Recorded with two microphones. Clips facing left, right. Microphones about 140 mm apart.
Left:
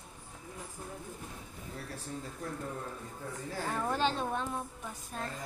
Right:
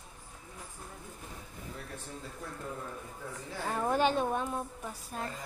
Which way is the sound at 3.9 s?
15° right (ahead or behind).